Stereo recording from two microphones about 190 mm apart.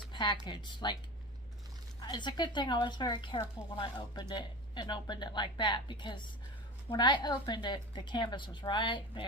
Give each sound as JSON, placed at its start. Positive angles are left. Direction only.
{"t": 0.1, "sound": "a sound", "side_deg": 25}
{"t": 0.4, "sound": "speech", "side_deg": 25}
{"t": 2.0, "sound": "speech", "side_deg": 25}